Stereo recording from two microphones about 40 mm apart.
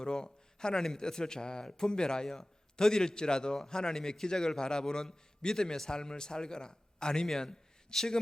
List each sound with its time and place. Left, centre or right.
0.0 s a man's voice: centre